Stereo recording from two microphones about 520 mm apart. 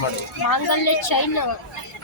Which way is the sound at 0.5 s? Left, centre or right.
Left.